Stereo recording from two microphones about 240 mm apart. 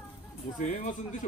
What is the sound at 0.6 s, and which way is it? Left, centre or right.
Speech, left.